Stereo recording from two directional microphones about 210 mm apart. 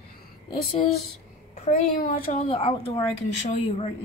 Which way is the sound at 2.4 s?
25° left (ahead or behind).